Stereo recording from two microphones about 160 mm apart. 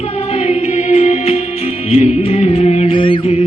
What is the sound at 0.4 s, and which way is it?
Music, 40° left (ahead or behind).